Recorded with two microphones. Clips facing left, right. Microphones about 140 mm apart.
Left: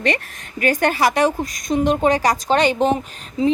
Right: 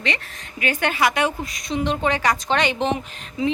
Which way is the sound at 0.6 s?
40° left (ahead or behind).